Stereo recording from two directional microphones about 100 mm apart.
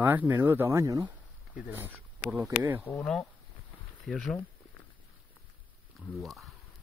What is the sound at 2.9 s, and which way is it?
Speech, 20° left (ahead or behind).